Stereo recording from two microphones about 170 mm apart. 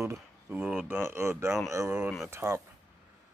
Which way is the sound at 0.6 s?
5° right (ahead or behind).